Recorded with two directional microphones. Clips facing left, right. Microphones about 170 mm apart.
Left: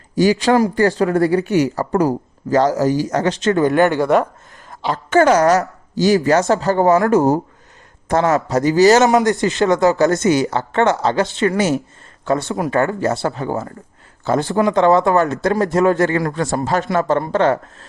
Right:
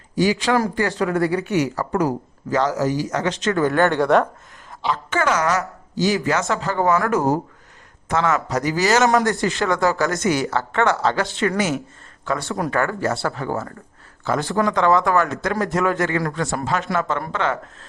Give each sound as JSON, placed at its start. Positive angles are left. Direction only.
{"t": 0.2, "sound": "speech", "side_deg": 40}
{"t": 3.6, "sound": "speech", "side_deg": 20}
{"t": 3.8, "sound": "speech", "side_deg": 5}
{"t": 4.7, "sound": "a man's voice", "side_deg": 45}